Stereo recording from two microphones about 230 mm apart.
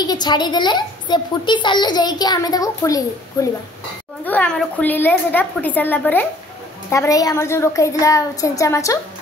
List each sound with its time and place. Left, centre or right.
0.0 s a woman's voice: centre